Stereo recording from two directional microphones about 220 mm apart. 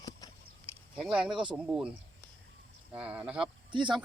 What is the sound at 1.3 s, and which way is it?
Speech, 20° right (ahead or behind).